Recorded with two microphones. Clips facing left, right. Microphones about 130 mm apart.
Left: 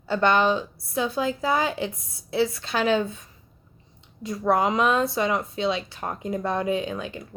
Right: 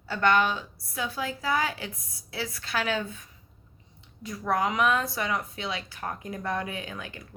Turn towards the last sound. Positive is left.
turn(degrees=25)  # may be behind; listen again after turning